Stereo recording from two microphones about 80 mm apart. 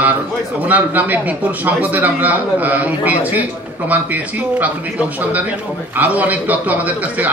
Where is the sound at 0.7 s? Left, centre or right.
Right.